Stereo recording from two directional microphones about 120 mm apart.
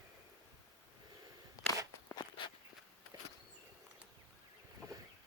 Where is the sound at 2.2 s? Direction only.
40° left (ahead or behind).